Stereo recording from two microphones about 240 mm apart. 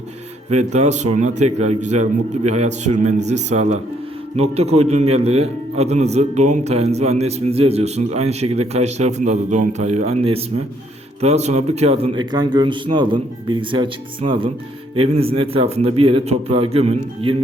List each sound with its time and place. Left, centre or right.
0.5 s a man's voice: right